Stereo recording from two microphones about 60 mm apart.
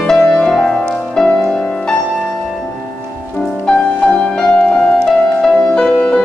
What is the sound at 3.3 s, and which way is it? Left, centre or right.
Music, centre.